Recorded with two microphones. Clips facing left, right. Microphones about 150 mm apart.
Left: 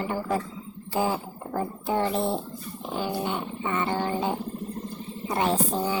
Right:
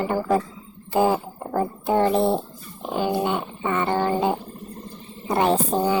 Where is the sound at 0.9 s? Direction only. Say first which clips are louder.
Right 6 dB; 55° right (ahead or behind).